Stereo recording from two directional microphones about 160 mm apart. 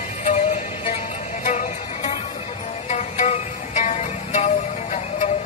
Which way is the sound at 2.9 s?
45° left (ahead or behind).